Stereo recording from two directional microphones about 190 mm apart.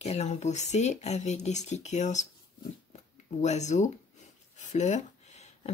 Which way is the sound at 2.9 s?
35° left (ahead or behind).